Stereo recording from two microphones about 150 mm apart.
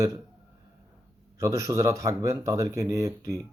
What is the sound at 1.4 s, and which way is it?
Speech, 20° right (ahead or behind).